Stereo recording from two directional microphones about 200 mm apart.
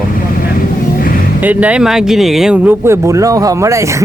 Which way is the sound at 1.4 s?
10° right (ahead or behind).